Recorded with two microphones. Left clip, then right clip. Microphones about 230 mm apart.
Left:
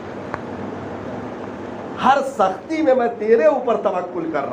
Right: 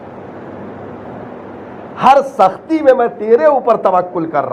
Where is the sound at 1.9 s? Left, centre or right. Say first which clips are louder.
Right 7 dB; right.